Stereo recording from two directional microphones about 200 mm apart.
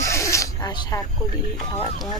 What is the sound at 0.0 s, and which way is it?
Snake, 15° left (ahead or behind).